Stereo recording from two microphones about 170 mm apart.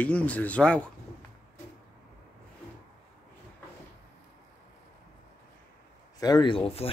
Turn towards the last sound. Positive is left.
turn(degrees=35)  # may be behind; listen again after turning